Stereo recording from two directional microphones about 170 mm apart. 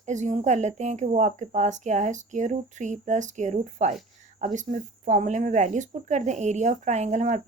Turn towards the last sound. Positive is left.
turn(degrees=-45)  # may be behind; listen again after turning